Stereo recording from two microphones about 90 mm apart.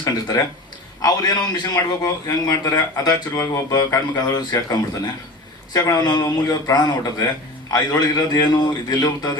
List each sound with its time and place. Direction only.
0.0 s speech: 45° left (ahead or behind)
3.4 s speech: 35° left (ahead or behind)